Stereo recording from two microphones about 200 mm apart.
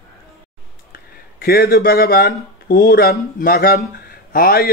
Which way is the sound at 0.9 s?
50° left (ahead or behind).